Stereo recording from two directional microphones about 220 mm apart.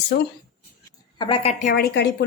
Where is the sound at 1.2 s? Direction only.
25° left (ahead or behind).